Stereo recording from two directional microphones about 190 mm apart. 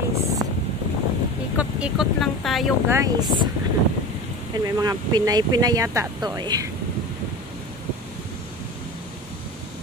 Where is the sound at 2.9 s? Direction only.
15° right (ahead or behind).